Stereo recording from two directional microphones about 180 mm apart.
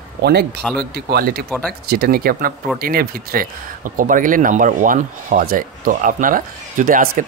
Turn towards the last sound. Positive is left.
turn(degrees=-50)  # may be behind; listen again after turning